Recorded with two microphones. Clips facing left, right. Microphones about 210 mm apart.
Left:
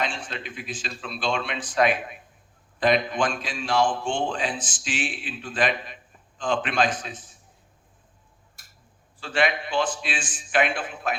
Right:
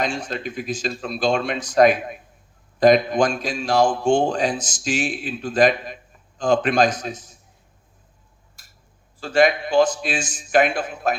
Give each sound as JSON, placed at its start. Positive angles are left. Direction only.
{"t": 0.0, "sound": "a man's voice", "side_deg": -40}
{"t": 9.2, "sound": "a man's voice", "side_deg": -40}